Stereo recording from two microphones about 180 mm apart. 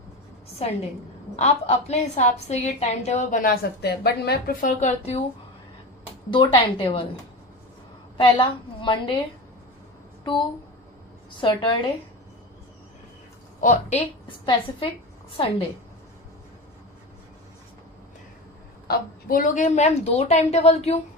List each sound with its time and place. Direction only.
1.4 s a woman's voice: 35° left (ahead or behind)
6.3 s a woman's voice: 25° left (ahead or behind)
8.2 s a woman's voice: 30° left (ahead or behind)
11.3 s a woman's voice: 25° left (ahead or behind)
13.6 s a woman's voice: 45° left (ahead or behind)
14.3 s a woman's voice: 30° left (ahead or behind)
18.9 s a woman's voice: 50° left (ahead or behind)